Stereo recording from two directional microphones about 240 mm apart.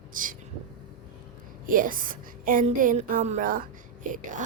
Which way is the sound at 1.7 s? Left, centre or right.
Right.